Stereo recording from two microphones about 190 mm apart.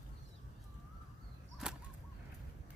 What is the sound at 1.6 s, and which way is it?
Whip, 5° right (ahead or behind).